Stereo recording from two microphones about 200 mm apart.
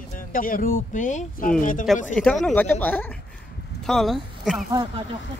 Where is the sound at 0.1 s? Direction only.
45° left (ahead or behind).